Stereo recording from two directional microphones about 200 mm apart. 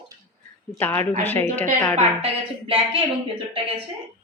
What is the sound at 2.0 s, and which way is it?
Speech, 30° right (ahead or behind).